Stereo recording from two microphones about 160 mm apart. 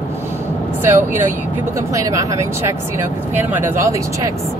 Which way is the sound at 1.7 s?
20° right (ahead or behind).